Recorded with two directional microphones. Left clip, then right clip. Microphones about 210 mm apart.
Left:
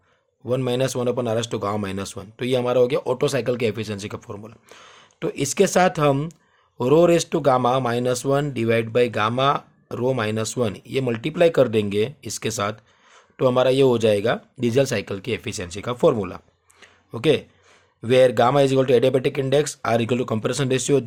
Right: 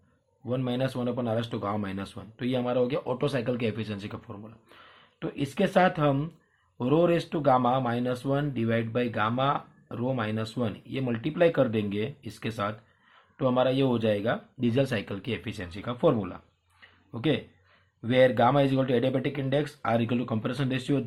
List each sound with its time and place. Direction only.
0.4 s speech: 50° left (ahead or behind)
16.8 s a sound: 50° left (ahead or behind)
18.0 s speech: 50° left (ahead or behind)